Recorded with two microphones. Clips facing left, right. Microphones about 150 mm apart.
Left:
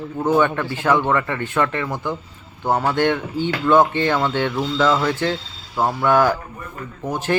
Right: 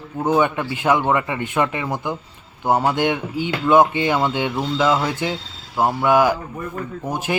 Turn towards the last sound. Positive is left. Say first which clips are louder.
# left 1 dB
turn(degrees=-15)  # may be behind; listen again after turning